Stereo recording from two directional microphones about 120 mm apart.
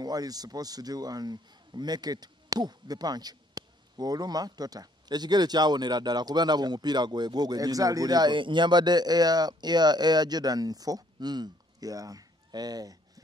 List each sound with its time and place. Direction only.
0.0 s a man's voice: 30° right (ahead or behind)